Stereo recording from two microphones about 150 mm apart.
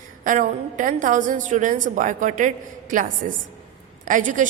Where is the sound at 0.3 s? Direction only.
60° right (ahead or behind).